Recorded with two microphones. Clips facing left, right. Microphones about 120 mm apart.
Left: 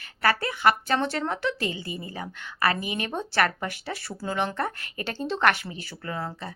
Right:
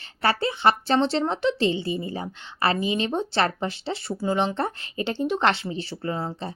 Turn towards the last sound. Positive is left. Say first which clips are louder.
# right 4 dB
turn(degrees=-25)  # may be behind; listen again after turning